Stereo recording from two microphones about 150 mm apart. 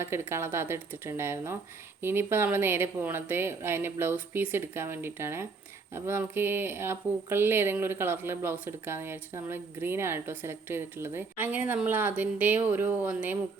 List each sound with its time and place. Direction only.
0.0 s speech: 15° right (ahead or behind)